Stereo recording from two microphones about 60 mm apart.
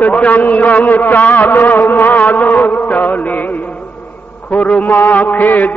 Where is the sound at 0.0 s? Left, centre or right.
Left.